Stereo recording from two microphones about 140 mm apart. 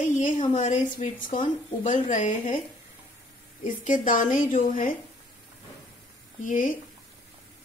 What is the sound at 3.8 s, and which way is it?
A woman's voice, 70° left (ahead or behind).